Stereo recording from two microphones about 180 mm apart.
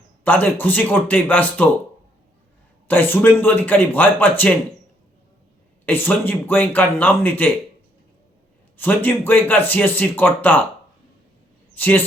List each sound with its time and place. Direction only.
0.3 s speech: 10° left (ahead or behind)
2.8 s speech: 10° left (ahead or behind)
5.8 s speech: 10° left (ahead or behind)
8.8 s speech: 10° left (ahead or behind)
11.8 s speech: 10° left (ahead or behind)